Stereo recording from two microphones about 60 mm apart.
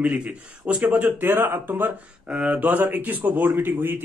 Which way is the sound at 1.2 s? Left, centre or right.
Right.